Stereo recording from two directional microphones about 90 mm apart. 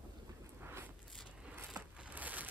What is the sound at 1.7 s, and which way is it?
Crushing, 15° right (ahead or behind).